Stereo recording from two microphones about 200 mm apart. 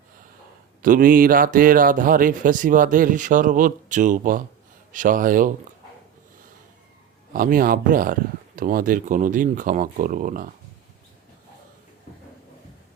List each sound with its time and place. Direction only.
0.8 s a man's voice: 45° right (ahead or behind)
7.3 s a man's voice: 45° right (ahead or behind)